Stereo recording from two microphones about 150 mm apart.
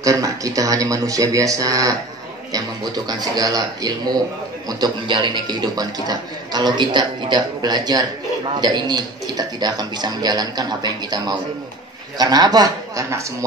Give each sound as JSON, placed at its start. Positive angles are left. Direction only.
{"t": 0.0, "sound": "a man's voice", "side_deg": -20}